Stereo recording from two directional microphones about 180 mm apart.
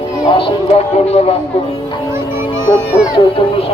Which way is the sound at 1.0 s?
35° left (ahead or behind).